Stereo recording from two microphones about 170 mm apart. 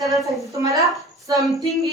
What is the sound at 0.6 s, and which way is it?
Speech, 20° right (ahead or behind).